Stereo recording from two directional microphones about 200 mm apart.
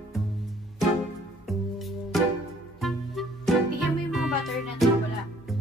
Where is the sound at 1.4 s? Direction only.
Centre (ahead or behind).